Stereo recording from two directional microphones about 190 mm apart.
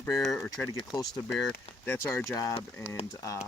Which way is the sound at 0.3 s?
5° left (ahead or behind).